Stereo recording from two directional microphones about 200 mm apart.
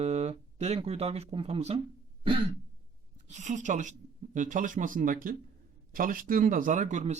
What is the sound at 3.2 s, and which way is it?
Speech, 35° right (ahead or behind).